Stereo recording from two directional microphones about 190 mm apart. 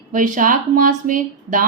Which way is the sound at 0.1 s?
45° right (ahead or behind).